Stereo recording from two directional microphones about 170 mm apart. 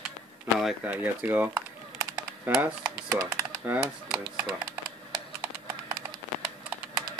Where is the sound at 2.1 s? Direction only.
10° right (ahead or behind).